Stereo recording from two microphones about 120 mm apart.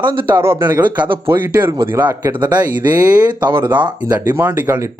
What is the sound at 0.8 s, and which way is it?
Speech, 40° right (ahead or behind).